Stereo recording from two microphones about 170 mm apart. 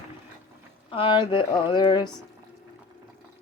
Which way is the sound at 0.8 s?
30° left (ahead or behind).